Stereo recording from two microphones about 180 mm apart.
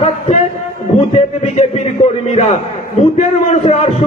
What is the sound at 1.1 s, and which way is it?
A man's voice, 35° left (ahead or behind).